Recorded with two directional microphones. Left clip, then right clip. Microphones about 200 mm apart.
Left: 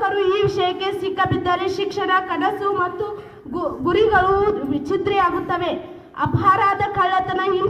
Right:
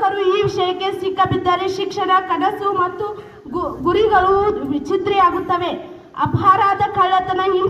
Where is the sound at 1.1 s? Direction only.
45° right (ahead or behind).